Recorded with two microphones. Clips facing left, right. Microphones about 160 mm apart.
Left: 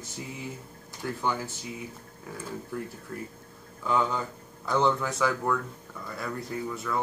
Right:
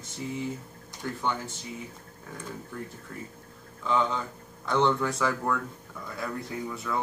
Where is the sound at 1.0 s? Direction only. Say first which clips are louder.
Left 1 dB; 5° left (ahead or behind).